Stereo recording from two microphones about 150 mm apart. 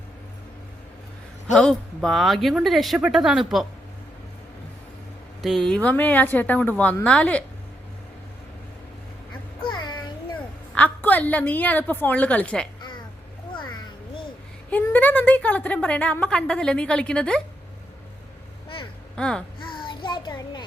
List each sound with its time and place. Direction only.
1.5 s speech: 5° left (ahead or behind)
5.4 s a woman's voice: centre (ahead or behind)
9.6 s music: 30° left (ahead or behind)
10.8 s a woman's voice: 10° left (ahead or behind)
14.7 s a woman's voice: 10° left (ahead or behind)
19.1 s speech: 5° left (ahead or behind)
19.6 s child singing: 35° left (ahead or behind)